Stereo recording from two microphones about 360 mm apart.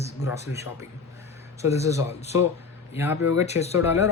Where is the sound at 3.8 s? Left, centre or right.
Centre.